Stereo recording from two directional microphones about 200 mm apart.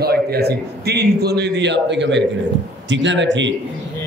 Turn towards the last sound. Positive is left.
turn(degrees=-65)  # may be behind; listen again after turning